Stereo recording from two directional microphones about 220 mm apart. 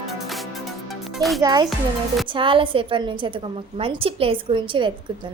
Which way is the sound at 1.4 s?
20° right (ahead or behind).